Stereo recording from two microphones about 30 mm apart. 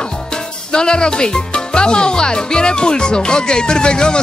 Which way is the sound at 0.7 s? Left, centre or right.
Left.